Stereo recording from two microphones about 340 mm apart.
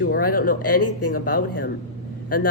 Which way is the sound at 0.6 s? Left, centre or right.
Left.